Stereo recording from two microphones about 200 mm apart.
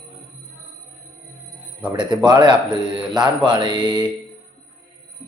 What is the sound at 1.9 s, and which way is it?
Mantra, 25° right (ahead or behind).